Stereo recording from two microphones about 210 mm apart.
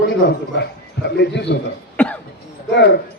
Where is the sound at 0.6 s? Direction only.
55° left (ahead or behind).